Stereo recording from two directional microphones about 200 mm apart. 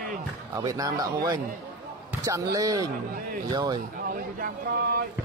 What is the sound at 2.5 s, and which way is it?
Speech, 15° right (ahead or behind).